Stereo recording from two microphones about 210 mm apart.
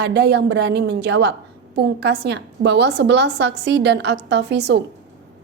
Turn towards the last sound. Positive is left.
turn(degrees=-55)  # may be behind; listen again after turning